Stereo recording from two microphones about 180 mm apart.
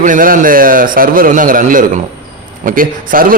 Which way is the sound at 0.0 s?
50° right (ahead or behind).